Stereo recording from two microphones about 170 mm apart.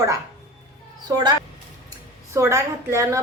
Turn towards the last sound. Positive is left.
turn(degrees=-15)  # may be behind; listen again after turning